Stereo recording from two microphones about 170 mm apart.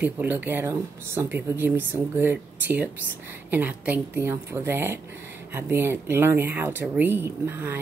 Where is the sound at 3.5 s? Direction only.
10° right (ahead or behind).